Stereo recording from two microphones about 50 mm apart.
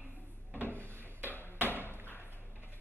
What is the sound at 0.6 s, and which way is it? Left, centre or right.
Drawer open or close, right.